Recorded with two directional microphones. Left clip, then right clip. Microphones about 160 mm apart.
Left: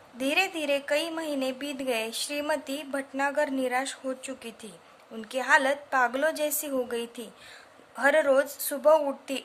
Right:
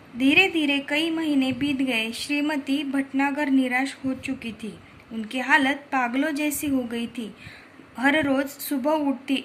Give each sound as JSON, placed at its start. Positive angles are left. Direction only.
{"t": 0.2, "sound": "speech", "side_deg": 55}